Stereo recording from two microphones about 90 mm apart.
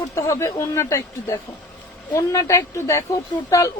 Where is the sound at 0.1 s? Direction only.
35° left (ahead or behind).